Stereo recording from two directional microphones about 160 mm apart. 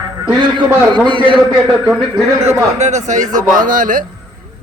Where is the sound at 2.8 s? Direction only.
45° right (ahead or behind).